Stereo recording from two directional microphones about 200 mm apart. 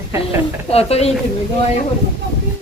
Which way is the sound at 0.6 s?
30° left (ahead or behind).